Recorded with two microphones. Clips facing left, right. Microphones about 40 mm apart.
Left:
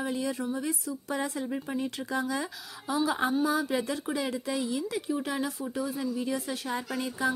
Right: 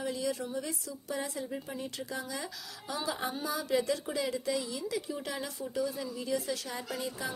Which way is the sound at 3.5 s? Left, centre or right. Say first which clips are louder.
Left 2 dB; left.